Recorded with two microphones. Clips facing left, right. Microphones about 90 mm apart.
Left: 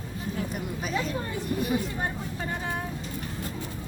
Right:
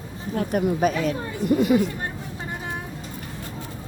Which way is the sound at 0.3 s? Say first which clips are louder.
Right 13 dB; 55° right (ahead or behind).